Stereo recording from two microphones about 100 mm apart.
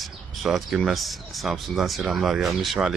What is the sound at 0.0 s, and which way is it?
Speech, centre (ahead or behind).